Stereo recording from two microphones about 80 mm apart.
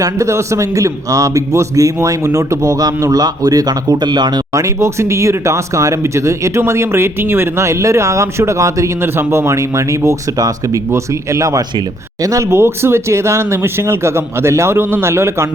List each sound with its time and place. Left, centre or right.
0.0 s a man's voice: right
4.6 s speech: right
9.0 s speech: right